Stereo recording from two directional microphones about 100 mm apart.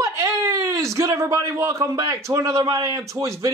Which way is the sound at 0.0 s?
30° right (ahead or behind).